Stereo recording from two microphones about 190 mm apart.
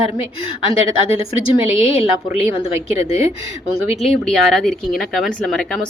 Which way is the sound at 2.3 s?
30° left (ahead or behind).